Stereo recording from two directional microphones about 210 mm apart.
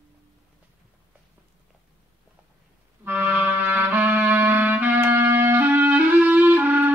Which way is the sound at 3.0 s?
10° right (ahead or behind).